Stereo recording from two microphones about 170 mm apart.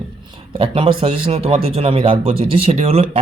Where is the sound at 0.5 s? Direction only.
30° right (ahead or behind).